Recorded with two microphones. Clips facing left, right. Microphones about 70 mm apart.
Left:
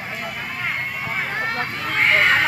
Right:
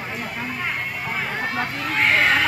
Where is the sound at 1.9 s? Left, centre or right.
Left.